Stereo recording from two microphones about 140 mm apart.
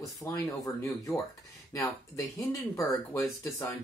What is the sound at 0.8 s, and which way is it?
Speech, 20° left (ahead or behind).